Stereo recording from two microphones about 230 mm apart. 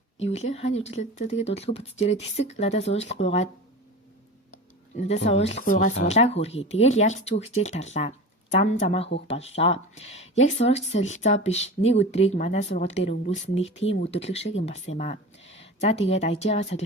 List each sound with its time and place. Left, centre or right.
0.2 s speech: left
4.9 s speech: left
15.4 s a sound: left
15.8 s speech: left